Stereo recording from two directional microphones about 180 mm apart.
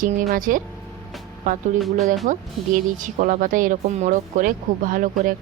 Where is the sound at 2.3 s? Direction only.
45° right (ahead or behind).